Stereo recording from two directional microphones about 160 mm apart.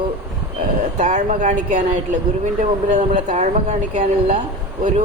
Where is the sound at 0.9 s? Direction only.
50° right (ahead or behind).